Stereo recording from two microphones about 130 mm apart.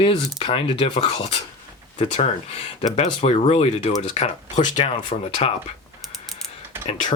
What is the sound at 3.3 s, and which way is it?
Speech, 45° left (ahead or behind).